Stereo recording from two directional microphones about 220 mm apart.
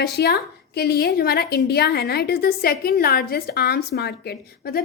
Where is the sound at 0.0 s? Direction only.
45° left (ahead or behind).